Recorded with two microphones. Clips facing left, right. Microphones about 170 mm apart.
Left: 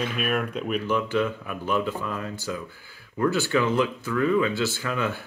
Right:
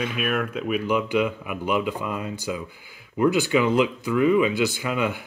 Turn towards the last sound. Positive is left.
turn(degrees=-15)  # may be behind; listen again after turning